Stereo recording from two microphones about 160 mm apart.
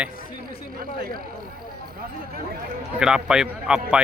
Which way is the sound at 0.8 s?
65° right (ahead or behind).